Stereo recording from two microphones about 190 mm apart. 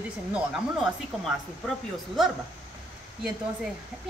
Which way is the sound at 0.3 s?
5° right (ahead or behind).